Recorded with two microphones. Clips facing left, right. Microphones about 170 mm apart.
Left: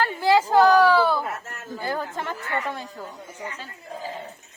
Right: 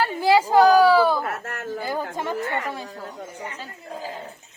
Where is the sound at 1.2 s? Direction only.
70° right (ahead or behind).